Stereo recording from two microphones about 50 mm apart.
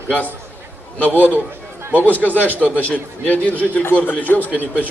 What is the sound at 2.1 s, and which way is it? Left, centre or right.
A man's voice, left.